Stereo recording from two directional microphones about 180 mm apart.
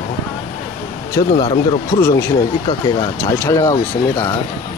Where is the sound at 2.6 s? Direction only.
25° left (ahead or behind).